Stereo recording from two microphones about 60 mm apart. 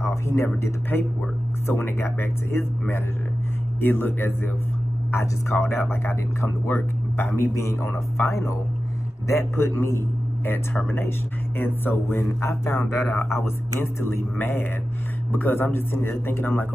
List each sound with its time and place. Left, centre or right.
0.0 s a man's voice: left
3.8 s a man's voice: left
5.1 s speech: left
9.3 s a man's voice: left
12.4 s speech: left
13.7 s a man's voice: left